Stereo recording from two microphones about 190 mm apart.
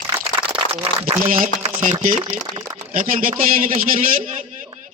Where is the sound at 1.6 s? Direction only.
40° right (ahead or behind).